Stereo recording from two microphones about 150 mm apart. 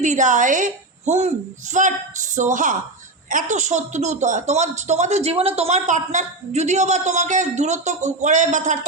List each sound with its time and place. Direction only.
0.0 s a woman's voice: 55° right (ahead or behind)